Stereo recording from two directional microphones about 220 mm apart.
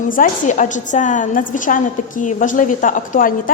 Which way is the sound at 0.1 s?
35° left (ahead or behind).